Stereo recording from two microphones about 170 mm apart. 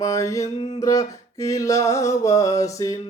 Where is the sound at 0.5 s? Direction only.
30° left (ahead or behind).